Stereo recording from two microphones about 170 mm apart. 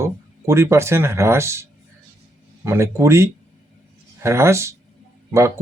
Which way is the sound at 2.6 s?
15° right (ahead or behind).